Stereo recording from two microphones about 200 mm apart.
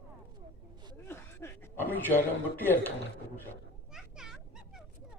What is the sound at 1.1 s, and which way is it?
Chuckle, 10° left (ahead or behind).